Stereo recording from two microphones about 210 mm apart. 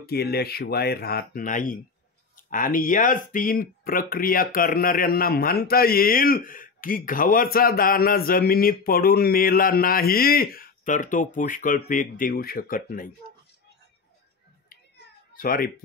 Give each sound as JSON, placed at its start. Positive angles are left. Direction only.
{"t": 0.0, "sound": "speech", "side_deg": 50}
{"t": 15.3, "sound": "speech", "side_deg": 45}